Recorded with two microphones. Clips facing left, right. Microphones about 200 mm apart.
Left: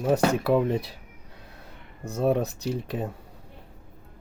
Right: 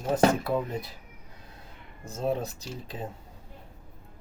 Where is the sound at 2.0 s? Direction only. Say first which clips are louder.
Left 5 dB; 65° left (ahead or behind).